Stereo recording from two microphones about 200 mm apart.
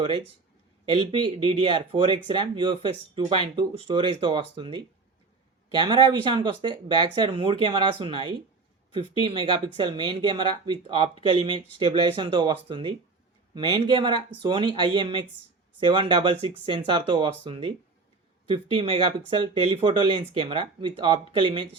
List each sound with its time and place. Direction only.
0.9 s speech: 25° right (ahead or behind)